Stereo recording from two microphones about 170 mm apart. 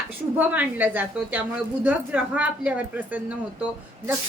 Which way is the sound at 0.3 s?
10° right (ahead or behind).